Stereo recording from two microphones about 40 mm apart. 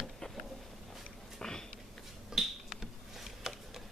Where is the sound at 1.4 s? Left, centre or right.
Centre.